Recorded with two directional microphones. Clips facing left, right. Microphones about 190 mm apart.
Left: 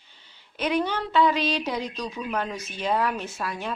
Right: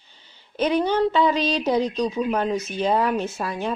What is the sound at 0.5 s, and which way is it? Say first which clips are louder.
A woman's voice: right 5 dB; 30° right (ahead or behind).